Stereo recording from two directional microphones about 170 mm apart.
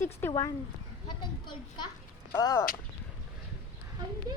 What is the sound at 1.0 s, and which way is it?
A child's voice, 25° left (ahead or behind).